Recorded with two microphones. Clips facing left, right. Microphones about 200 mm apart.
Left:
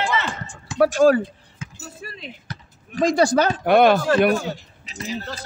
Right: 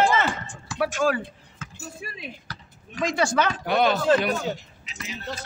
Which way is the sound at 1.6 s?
15° left (ahead or behind).